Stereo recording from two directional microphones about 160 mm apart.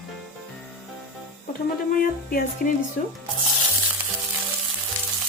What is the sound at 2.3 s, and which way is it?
Speech, 65° left (ahead or behind).